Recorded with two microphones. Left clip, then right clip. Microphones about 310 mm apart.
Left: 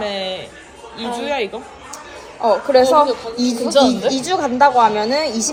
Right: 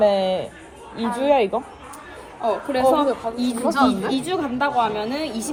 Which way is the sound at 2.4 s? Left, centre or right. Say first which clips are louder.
Left 6 dB; left.